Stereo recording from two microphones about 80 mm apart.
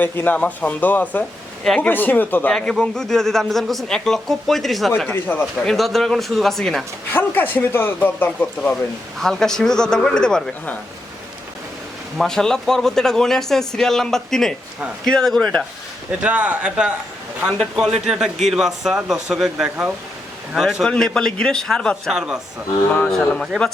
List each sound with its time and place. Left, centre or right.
0.0 s speech: left
2.5 s a man's voice: centre
5.0 s speech: left
5.6 s a man's voice: centre
7.1 s speech: left
9.1 s a man's voice: centre
12.1 s a man's voice: centre
16.2 s a man's voice: centre
19.6 s speech: right
20.5 s a man's voice: centre
20.8 s a man's voice: centre
22.1 s speech: centre
23.0 s a man's voice: centre